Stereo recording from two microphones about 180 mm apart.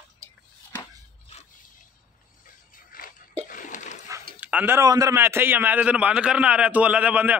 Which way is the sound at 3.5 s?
45° left (ahead or behind).